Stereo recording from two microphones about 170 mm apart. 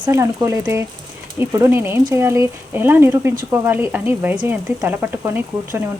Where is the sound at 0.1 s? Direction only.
15° right (ahead or behind).